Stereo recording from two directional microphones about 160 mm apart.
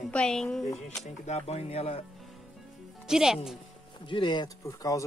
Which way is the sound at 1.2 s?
45° left (ahead or behind).